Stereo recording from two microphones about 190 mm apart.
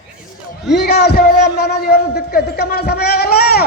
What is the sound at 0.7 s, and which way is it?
A man's voice, 60° left (ahead or behind).